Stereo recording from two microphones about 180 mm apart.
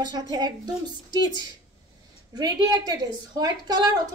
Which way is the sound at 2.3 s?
20° right (ahead or behind).